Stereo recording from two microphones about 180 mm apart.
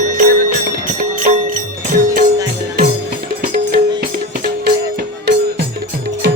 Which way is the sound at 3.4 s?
50° right (ahead or behind).